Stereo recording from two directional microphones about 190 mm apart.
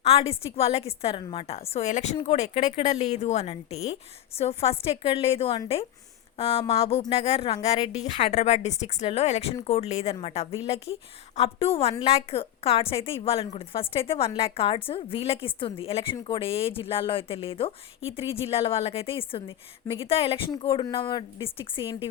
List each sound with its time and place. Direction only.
0.0 s a woman's voice: 30° left (ahead or behind)